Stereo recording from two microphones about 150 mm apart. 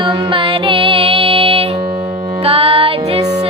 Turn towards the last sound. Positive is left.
turn(degrees=-40)  # may be behind; listen again after turning